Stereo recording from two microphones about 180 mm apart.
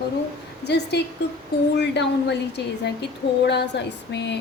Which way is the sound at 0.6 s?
70° left (ahead or behind).